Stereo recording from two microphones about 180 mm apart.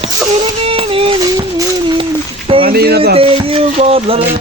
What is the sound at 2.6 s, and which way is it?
Speech, 60° right (ahead or behind).